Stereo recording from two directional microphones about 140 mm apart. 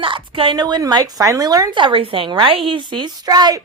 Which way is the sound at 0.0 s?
40° right (ahead or behind).